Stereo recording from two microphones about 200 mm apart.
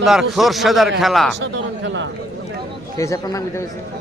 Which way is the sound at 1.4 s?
65° right (ahead or behind).